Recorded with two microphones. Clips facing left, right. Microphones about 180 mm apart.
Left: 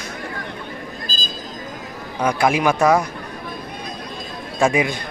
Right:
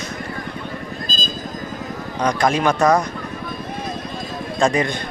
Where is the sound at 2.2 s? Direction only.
10° left (ahead or behind).